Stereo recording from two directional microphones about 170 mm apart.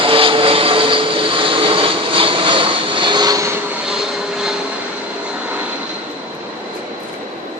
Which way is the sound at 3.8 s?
5° right (ahead or behind).